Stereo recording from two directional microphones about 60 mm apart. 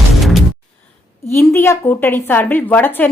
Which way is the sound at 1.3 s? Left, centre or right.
Left.